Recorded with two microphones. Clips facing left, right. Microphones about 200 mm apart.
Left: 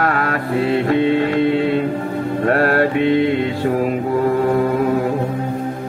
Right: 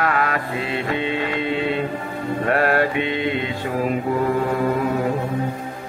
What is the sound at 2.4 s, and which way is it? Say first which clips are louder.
Music: left 3 dB; 45° left (ahead or behind).